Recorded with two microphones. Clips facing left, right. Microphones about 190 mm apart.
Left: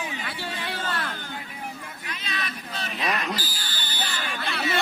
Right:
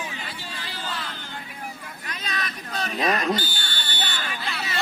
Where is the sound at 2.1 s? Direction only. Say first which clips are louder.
Right 2 dB; 40° right (ahead or behind).